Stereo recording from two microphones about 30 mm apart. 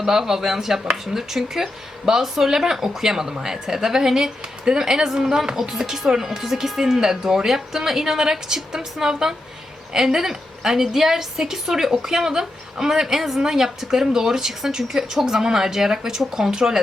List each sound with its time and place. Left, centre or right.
0.0 s speech: centre